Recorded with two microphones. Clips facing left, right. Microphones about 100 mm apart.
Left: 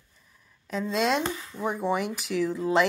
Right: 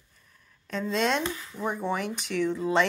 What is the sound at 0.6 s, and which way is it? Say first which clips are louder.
Speech: left 1 dB; 5° left (ahead or behind).